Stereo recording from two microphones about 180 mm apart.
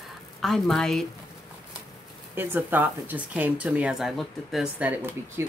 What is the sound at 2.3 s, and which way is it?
Speech, 10° right (ahead or behind).